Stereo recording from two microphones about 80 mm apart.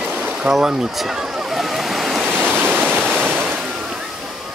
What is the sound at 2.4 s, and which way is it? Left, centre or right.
Waterfall, right.